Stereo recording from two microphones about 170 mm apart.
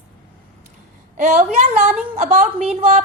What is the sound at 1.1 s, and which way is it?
Speech, 45° right (ahead or behind).